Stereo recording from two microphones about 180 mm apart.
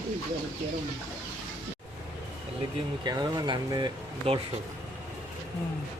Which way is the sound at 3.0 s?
25° right (ahead or behind).